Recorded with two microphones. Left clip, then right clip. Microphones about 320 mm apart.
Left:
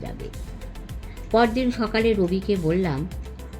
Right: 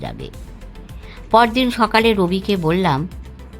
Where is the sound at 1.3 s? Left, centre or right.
Right.